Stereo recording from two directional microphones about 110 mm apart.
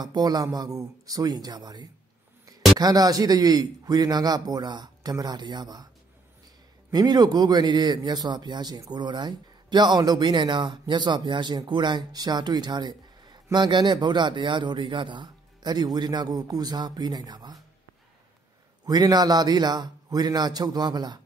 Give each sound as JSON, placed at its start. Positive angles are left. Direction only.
{"t": 0.0, "sound": "a man's voice", "side_deg": -40}
{"t": 6.9, "sound": "a man's voice", "side_deg": -35}
{"t": 18.9, "sound": "a man's voice", "side_deg": -35}